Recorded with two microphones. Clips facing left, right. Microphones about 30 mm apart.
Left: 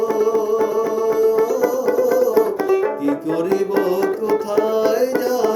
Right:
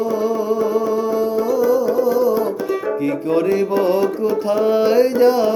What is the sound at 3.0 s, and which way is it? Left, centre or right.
Music, right.